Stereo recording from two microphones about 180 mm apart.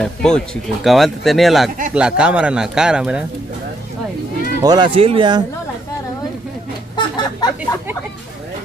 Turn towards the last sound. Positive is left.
turn(degrees=25)  # may be behind; listen again after turning